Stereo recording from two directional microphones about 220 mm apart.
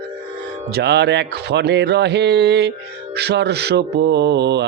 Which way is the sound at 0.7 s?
50° right (ahead or behind).